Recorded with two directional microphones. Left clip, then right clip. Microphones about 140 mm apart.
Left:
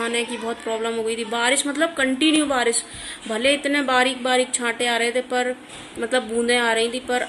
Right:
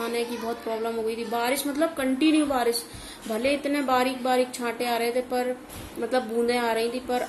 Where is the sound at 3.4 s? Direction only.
10° left (ahead or behind).